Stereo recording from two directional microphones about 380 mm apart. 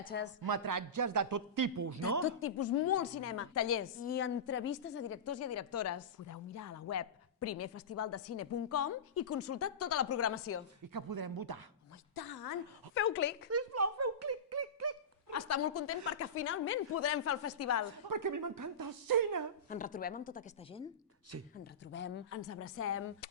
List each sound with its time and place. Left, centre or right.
0.0 s a woman's voice: left
0.4 s a man's voice: right
2.2 s a woman's voice: left
4.0 s a woman's voice: left
10.9 s speech: right
12.1 s a sound: left
12.9 s a woman's voice: left
13.5 s a sound: right
15.3 s a woman's voice: left
18.1 s a man's voice: right
19.7 s a woman's voice: left